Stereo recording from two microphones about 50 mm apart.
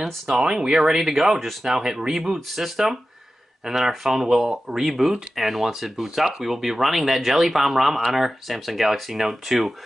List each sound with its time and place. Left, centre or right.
0.4 s speech: centre